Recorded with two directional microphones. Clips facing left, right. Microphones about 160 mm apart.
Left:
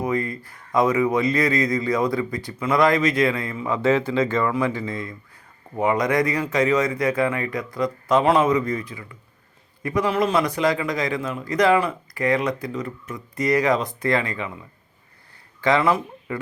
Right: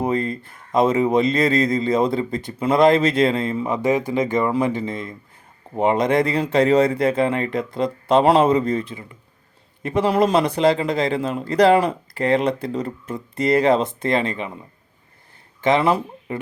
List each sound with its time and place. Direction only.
0.0 s a man's voice: 25° right (ahead or behind)
3.8 s a man's voice: 15° right (ahead or behind)